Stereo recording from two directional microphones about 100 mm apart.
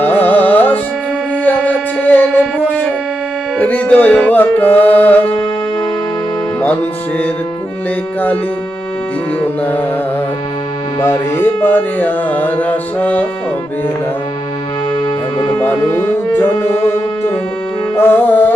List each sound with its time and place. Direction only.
0.0 s carnatic music: 20° left (ahead or behind)
1.5 s civil defense siren: 15° left (ahead or behind)
3.6 s music: 15° left (ahead or behind)
11.0 s music: 25° left (ahead or behind)
15.5 s music: 25° left (ahead or behind)
17.9 s music: 20° left (ahead or behind)